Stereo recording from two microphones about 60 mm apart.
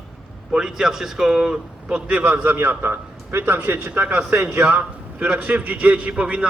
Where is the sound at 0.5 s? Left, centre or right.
Centre.